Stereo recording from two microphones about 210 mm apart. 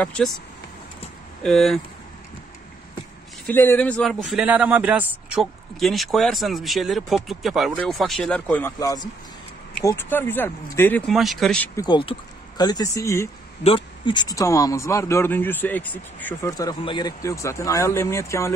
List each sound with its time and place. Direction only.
0.0 s a man's voice: 5° left (ahead or behind)
1.4 s a man's voice: centre (ahead or behind)
3.5 s a man's voice: 10° left (ahead or behind)
11.7 s speech: 20° left (ahead or behind)